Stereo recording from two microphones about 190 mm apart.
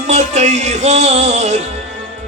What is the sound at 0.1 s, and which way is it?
Music, 35° right (ahead or behind).